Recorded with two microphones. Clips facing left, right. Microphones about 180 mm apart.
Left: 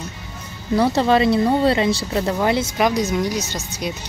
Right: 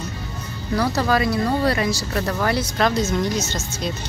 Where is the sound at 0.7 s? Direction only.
25° left (ahead or behind).